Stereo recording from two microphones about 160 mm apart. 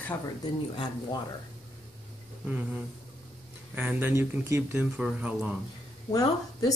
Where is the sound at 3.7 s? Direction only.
10° right (ahead or behind).